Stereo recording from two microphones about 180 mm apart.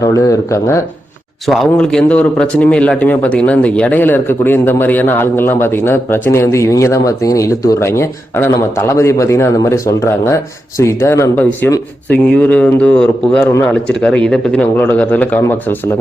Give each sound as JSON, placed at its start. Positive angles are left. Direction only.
{"t": 0.0, "sound": "speech", "side_deg": 20}
{"t": 1.5, "sound": "speech", "side_deg": 5}